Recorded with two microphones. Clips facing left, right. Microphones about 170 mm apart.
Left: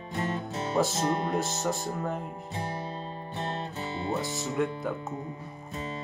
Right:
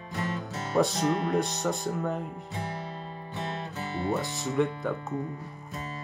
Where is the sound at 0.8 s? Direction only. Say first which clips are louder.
Right 2 dB; 5° left (ahead or behind).